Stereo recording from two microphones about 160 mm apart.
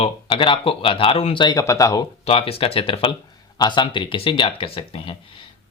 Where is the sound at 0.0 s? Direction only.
30° left (ahead or behind).